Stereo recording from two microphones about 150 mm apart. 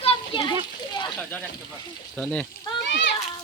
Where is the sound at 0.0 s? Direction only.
35° left (ahead or behind).